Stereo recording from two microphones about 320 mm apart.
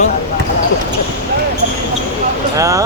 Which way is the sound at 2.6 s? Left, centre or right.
Centre.